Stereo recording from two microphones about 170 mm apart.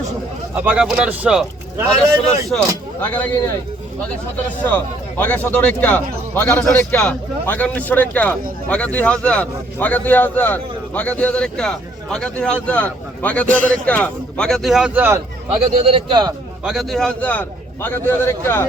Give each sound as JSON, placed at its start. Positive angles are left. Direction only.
{"t": 0.5, "sound": "speech", "side_deg": -10}
{"t": 2.5, "sound": "a man's voice", "side_deg": 10}
{"t": 4.6, "sound": "a man's voice", "side_deg": 10}
{"t": 15.5, "sound": "a man's voice", "side_deg": -30}
{"t": 16.6, "sound": "a man's voice", "side_deg": 0}